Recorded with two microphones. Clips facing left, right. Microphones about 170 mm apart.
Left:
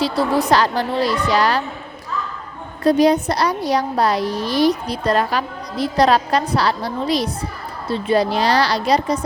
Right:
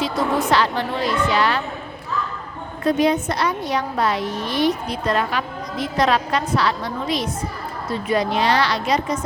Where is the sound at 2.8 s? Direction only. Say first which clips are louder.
Left 4 dB; 35° left (ahead or behind).